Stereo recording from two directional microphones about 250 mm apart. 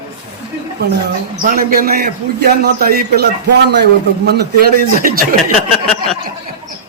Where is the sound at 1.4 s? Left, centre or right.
Right.